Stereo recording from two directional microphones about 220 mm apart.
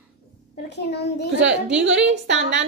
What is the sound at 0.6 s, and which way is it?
Speech, 50° left (ahead or behind).